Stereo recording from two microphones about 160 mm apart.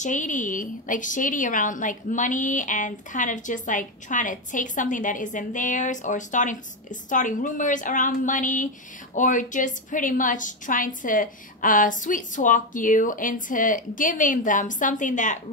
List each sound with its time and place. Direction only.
0.0 s a woman's voice: 50° left (ahead or behind)